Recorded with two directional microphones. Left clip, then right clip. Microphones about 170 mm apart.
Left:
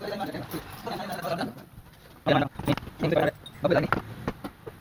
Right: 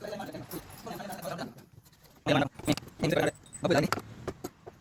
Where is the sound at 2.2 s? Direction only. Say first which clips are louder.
Left 3 dB; 55° right (ahead or behind).